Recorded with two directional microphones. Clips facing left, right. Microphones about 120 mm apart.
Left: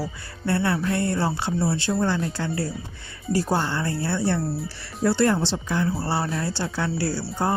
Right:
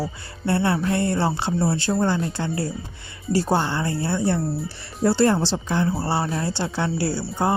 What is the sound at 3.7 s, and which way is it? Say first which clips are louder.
Speech: right 2 dB; 20° right (ahead or behind).